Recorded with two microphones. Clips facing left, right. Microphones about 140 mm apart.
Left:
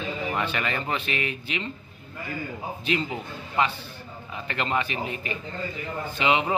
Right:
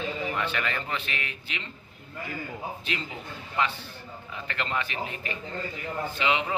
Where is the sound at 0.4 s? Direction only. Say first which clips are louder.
Left 2 dB; 15° left (ahead or behind).